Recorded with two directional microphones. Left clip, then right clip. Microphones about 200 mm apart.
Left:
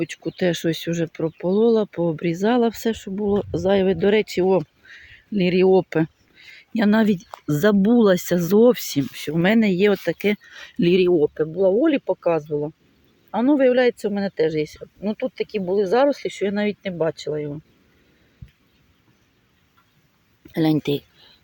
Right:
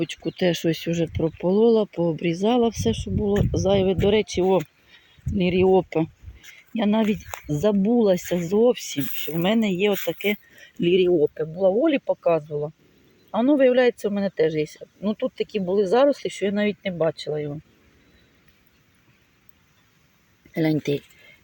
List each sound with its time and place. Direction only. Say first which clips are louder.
0.0 s speech: left 1 dB; 5° left (ahead or behind)
2.1 s speech: left 1 dB; 60° left (ahead or behind)
2.4 s speech: left 1 dB; 15° left (ahead or behind)
2.7 s speech: left 1 dB; 55° left (ahead or behind)
3.0 s speech: left 1 dB; 20° left (ahead or behind)
11.3 s speech: left 2 dB; 10° left (ahead or behind)
20.5 s speech: left 2 dB; 15° left (ahead or behind)